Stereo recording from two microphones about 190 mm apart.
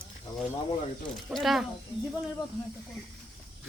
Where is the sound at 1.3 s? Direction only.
Centre (ahead or behind).